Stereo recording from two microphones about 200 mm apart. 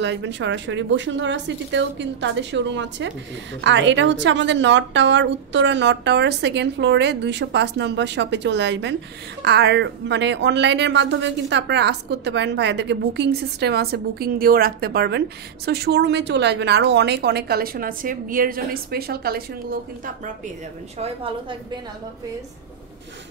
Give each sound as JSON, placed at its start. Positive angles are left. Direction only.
{"t": 0.0, "sound": "a woman's voice", "side_deg": -65}
{"t": 21.0, "sound": "a woman's voice", "side_deg": -25}